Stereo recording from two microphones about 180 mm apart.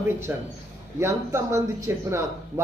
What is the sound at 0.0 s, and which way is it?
A man's voice, 15° right (ahead or behind).